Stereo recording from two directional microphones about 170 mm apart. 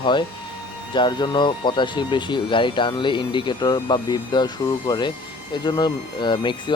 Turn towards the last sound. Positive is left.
turn(degrees=25)  # may be behind; listen again after turning